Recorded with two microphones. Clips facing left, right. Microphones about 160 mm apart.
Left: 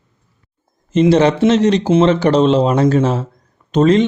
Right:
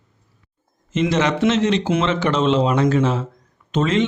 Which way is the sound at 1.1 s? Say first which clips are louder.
Left 5 dB; 30° left (ahead or behind).